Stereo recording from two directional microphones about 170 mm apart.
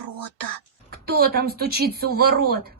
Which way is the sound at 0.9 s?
65° right (ahead or behind).